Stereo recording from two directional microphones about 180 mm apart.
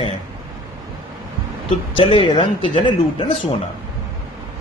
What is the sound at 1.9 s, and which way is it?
Speech, 30° left (ahead or behind).